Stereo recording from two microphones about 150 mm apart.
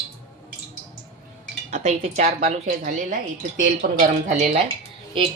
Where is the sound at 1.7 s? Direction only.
50° right (ahead or behind).